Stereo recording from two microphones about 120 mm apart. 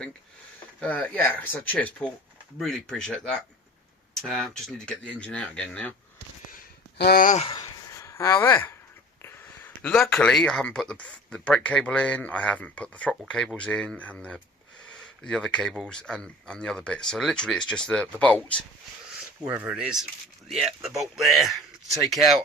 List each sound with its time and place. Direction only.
0.8 s speech: 15° left (ahead or behind)
7.4 s speech: 45° left (ahead or behind)
7.9 s speech: 25° left (ahead or behind)
19.5 s speech: 10° right (ahead or behind)